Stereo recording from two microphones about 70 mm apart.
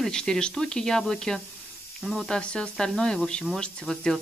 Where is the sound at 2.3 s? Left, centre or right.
Centre.